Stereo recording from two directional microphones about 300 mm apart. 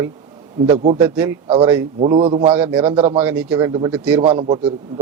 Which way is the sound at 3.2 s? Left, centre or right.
Centre.